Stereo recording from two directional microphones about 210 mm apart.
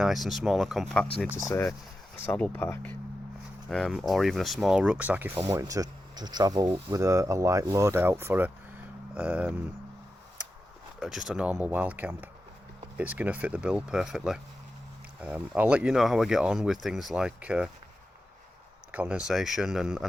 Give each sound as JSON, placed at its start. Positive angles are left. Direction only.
{"t": 0.0, "sound": "speech", "side_deg": 0}
{"t": 11.0, "sound": "speech", "side_deg": 0}
{"t": 18.9, "sound": "speech", "side_deg": -5}